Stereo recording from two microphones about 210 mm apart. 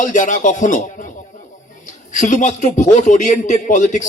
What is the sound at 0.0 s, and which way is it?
Speech, 35° left (ahead or behind).